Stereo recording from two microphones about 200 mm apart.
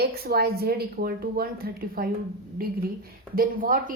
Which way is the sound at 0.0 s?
50° right (ahead or behind).